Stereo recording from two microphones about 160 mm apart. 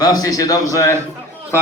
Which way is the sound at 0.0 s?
25° left (ahead or behind).